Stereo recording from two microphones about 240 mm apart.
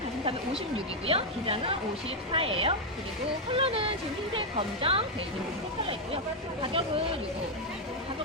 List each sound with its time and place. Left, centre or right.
1.0 s speech: right
6.6 s speech: right